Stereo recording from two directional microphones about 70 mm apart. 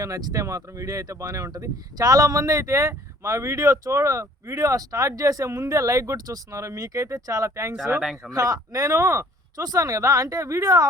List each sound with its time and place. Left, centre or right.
0.3 s speech: right
6.1 s speech: right
8.0 s speech: centre
8.3 s speech: right
9.6 s speech: right